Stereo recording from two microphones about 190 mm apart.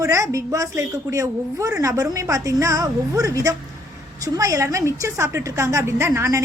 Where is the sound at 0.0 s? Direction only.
15° right (ahead or behind).